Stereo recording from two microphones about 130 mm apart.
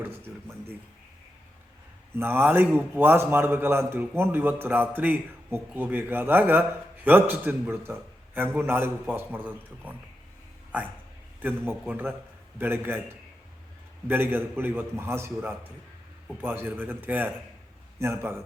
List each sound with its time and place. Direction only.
0.0 s speech: 15° right (ahead or behind)
2.1 s a man's voice: 15° right (ahead or behind)
11.3 s a man's voice: 15° right (ahead or behind)